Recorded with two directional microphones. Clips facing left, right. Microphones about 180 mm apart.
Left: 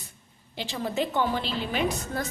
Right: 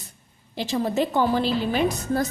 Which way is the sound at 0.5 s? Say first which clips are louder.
Right 6 dB; 40° right (ahead or behind).